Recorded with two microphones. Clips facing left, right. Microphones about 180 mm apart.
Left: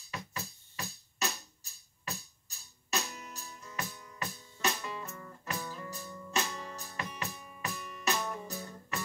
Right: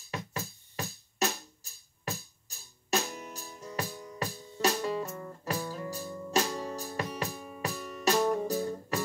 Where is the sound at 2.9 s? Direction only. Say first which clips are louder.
Right 6 dB; 50° right (ahead or behind).